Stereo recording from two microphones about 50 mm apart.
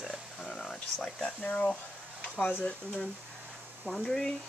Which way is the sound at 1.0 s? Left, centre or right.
Centre.